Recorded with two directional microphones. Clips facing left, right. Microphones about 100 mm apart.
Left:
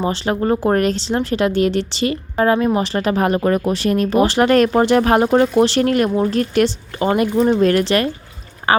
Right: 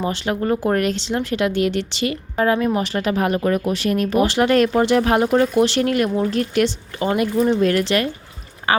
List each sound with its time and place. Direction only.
0.0 s speech: 35° left (ahead or behind)
7.6 s speech: 40° left (ahead or behind)